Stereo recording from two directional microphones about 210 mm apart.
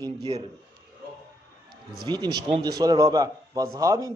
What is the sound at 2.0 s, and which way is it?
A man's voice, 20° right (ahead or behind).